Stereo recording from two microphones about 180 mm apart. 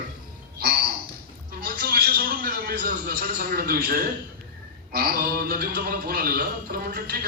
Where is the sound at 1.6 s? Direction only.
55° right (ahead or behind).